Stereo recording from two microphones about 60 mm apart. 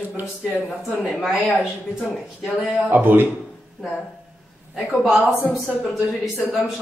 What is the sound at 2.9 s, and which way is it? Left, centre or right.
Mantra, right.